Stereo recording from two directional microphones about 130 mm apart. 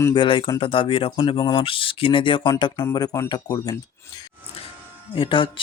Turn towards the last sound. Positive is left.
turn(degrees=40)  # may be behind; listen again after turning